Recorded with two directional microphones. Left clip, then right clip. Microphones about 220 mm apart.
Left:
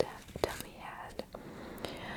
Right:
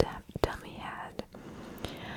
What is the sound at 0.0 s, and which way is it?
Whispering, 65° right (ahead or behind).